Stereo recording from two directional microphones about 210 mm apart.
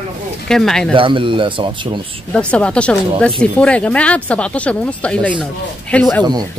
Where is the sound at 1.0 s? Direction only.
25° right (ahead or behind).